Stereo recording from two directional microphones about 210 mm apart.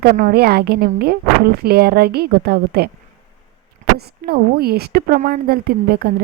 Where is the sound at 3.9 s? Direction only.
50° right (ahead or behind).